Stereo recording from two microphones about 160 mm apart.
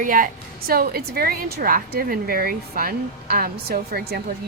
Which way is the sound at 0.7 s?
70° right (ahead or behind).